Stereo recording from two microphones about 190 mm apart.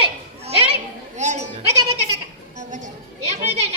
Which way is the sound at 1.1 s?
40° right (ahead or behind).